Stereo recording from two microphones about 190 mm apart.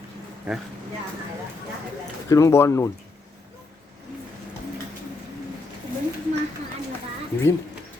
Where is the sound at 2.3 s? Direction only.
15° left (ahead or behind).